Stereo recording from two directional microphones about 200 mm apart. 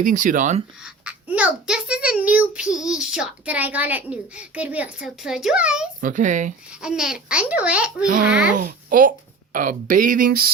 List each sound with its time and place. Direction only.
0.0 s speech: 40° right (ahead or behind)
0.8 s a child's voice: 5° right (ahead or behind)
6.0 s speech: 40° right (ahead or behind)
6.8 s a child's voice: 5° right (ahead or behind)
8.0 s speech: 45° right (ahead or behind)